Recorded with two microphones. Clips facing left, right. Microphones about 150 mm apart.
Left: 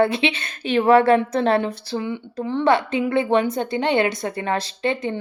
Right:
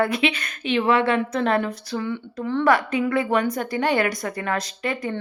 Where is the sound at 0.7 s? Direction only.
40° left (ahead or behind).